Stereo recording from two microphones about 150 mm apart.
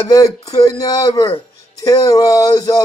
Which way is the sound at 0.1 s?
25° left (ahead or behind).